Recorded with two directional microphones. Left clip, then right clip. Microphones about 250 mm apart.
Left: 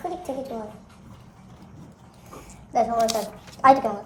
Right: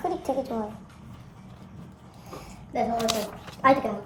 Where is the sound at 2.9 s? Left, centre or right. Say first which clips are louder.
Left 4 dB; centre.